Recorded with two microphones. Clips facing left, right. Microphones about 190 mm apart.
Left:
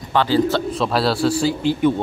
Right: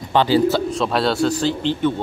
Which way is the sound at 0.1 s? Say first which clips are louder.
Right 2 dB; 20° right (ahead or behind).